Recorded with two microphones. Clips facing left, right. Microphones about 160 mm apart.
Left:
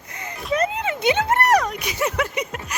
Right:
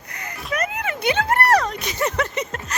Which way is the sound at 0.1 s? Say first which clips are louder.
Left 4 dB; 25° left (ahead or behind).